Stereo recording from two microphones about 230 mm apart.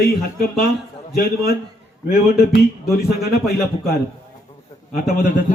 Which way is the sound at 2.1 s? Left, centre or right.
Left.